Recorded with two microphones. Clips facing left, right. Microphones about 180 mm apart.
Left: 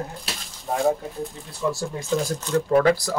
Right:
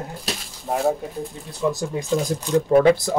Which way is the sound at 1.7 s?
15° right (ahead or behind).